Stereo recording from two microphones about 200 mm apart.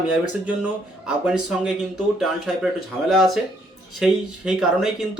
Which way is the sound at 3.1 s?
Centre (ahead or behind).